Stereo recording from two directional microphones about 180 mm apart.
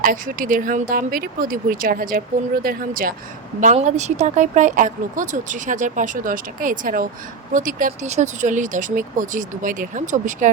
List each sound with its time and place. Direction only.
0.0 s speech: 50° right (ahead or behind)
3.6 s speech: 40° right (ahead or behind)